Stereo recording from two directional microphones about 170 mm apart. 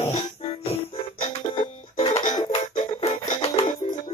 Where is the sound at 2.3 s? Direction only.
30° left (ahead or behind).